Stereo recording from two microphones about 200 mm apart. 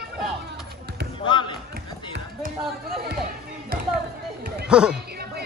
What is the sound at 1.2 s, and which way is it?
Basketball bounce, 25° left (ahead or behind).